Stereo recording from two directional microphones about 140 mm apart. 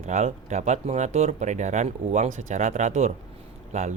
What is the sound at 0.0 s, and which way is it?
Speech, 55° right (ahead or behind).